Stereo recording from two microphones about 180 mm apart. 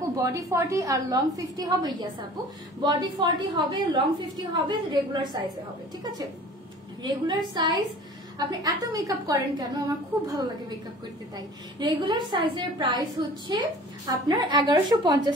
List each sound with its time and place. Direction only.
0.1 s a woman's voice: 20° right (ahead or behind)
7.0 s a woman's voice: 25° right (ahead or behind)